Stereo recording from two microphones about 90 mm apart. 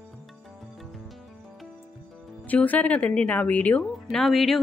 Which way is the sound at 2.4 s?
15° left (ahead or behind).